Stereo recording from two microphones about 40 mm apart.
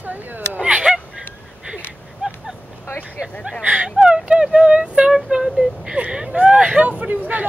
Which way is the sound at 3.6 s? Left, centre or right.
Right.